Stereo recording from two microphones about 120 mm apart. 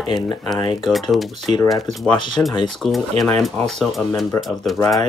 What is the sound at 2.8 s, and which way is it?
Speech, 5° left (ahead or behind).